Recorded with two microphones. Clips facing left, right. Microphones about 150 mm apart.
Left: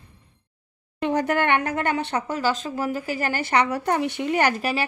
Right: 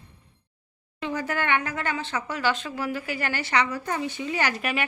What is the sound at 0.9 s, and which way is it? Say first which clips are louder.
A woman's voice: left 6 dB; 60° left (ahead or behind).